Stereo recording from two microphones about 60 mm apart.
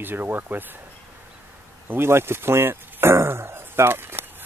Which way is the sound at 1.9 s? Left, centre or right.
Right.